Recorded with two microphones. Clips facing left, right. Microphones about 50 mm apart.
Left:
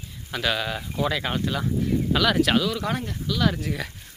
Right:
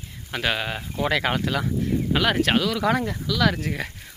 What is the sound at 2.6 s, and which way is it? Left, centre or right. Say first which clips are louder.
Speech: right 3 dB; right.